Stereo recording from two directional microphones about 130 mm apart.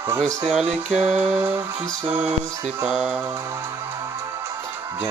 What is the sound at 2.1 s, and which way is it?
Music, 55° right (ahead or behind).